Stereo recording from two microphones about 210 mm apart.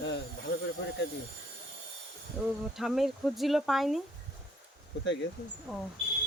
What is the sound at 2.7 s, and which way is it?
Speech, centre (ahead or behind).